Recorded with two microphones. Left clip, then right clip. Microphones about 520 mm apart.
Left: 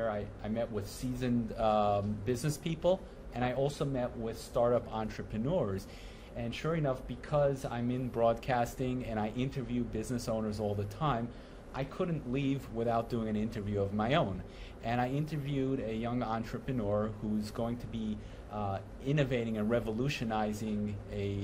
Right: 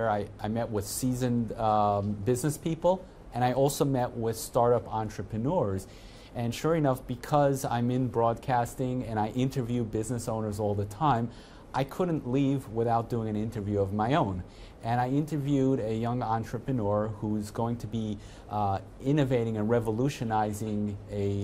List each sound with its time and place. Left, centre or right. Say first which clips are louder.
0.0 s speech: right 6 dB; right